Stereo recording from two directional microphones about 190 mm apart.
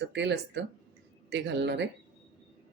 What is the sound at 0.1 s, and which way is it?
Speech, 65° right (ahead or behind).